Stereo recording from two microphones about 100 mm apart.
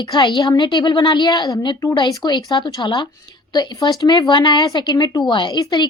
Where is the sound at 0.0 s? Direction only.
50° left (ahead or behind).